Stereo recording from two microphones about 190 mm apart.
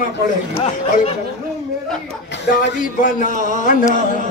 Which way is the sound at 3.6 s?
40° left (ahead or behind).